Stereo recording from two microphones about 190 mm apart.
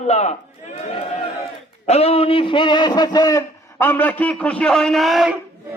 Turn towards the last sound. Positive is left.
turn(degrees=0)  # may be behind; listen again after turning